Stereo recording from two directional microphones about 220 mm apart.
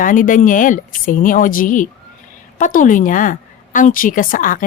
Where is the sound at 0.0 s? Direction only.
40° left (ahead or behind).